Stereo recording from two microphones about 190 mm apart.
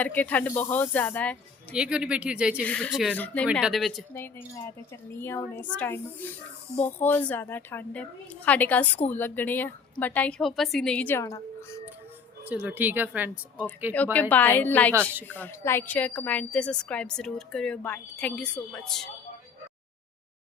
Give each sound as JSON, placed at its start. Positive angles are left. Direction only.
{"t": 0.0, "sound": "a woman's voice", "side_deg": 10}
{"t": 1.7, "sound": "speech", "side_deg": -5}
{"t": 2.6, "sound": "speech", "side_deg": 5}
{"t": 4.1, "sound": "a woman's voice", "side_deg": 10}
{"t": 12.5, "sound": "speech", "side_deg": -10}
{"t": 13.9, "sound": "a woman's voice", "side_deg": 10}